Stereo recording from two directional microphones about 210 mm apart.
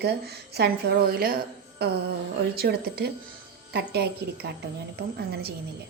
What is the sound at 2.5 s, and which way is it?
A woman's voice, 50° right (ahead or behind).